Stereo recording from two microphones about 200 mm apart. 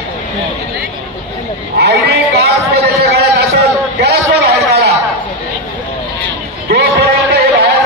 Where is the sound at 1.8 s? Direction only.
55° right (ahead or behind).